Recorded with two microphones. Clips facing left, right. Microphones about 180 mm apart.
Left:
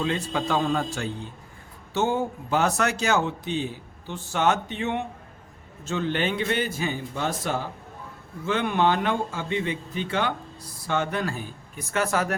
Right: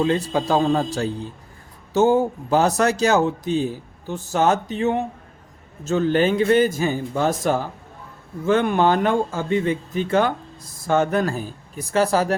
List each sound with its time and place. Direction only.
0.0 s speech: 35° right (ahead or behind)